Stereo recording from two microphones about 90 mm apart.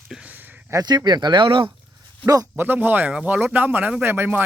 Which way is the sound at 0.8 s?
50° right (ahead or behind).